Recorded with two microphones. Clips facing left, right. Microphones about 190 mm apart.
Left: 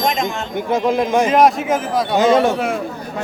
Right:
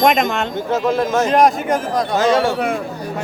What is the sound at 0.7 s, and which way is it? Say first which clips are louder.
Speech: left 2 dB; 15° left (ahead or behind).